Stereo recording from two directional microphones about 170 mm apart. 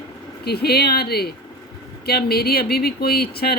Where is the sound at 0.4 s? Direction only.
70° left (ahead or behind).